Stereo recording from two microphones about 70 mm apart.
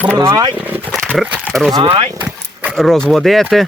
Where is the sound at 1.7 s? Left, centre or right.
Right.